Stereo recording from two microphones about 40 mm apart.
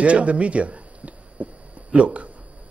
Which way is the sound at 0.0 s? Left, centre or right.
Right.